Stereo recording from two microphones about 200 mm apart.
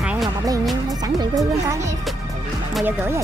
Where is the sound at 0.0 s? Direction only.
5° right (ahead or behind).